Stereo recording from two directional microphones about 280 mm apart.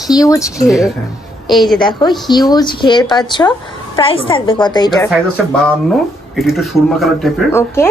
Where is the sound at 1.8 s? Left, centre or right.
Centre.